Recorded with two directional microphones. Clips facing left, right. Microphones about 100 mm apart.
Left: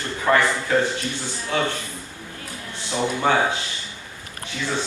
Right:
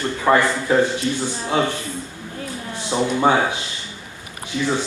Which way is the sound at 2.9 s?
20° right (ahead or behind).